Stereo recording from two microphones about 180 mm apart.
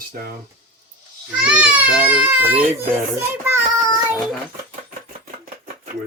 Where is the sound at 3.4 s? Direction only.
10° right (ahead or behind).